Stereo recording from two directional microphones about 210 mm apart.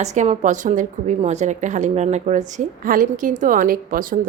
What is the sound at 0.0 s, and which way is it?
A woman's voice, 35° right (ahead or behind).